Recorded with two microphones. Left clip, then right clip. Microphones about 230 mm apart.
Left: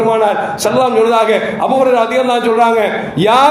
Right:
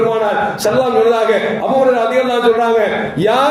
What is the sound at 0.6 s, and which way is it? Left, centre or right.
A man's voice, left.